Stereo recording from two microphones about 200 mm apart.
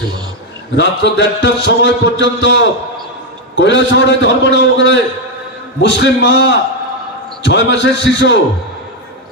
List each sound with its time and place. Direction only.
0.8 s a man's voice: 65° left (ahead or behind)